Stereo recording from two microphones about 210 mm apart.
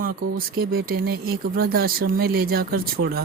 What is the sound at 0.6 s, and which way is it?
Speech, 45° right (ahead or behind).